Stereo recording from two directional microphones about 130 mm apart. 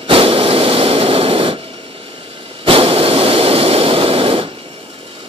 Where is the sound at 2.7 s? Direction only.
45° right (ahead or behind).